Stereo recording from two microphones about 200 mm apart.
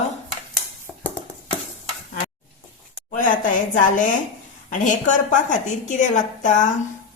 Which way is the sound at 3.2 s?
40° left (ahead or behind).